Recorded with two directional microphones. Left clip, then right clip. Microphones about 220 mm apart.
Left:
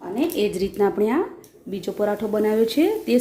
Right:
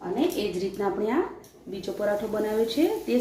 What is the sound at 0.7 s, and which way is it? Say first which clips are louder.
Speech: left 6 dB; 50° left (ahead or behind).